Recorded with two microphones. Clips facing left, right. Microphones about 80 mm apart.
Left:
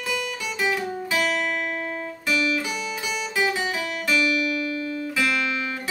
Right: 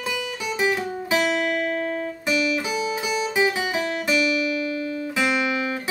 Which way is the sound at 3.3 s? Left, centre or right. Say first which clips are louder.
Right 1 dB; right.